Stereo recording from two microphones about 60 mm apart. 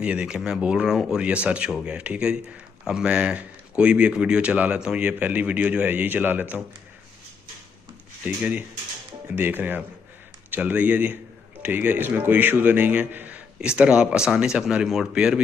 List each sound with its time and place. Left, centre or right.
0.0 s a man's voice: centre
5.0 s a man's voice: right
8.2 s a man's voice: right
13.6 s speech: centre